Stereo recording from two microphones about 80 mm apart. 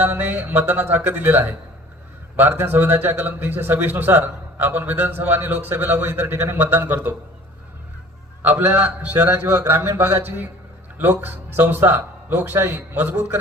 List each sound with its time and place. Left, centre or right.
0.0 s a man's voice: right
8.4 s a man's voice: right